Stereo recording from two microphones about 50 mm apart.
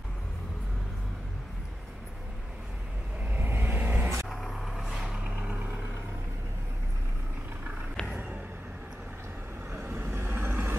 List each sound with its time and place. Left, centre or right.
3.3 s vehicle: right
4.4 s vehicle: centre
9.8 s vehicle: right